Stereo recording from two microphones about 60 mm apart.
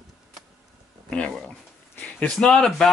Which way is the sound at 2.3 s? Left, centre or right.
Centre.